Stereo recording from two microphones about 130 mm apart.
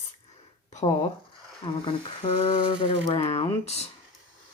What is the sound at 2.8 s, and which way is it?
Speech, 40° left (ahead or behind).